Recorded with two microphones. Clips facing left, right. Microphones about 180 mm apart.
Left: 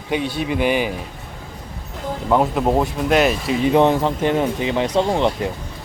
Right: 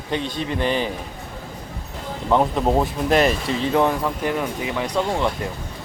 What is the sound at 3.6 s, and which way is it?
Speech, 20° left (ahead or behind).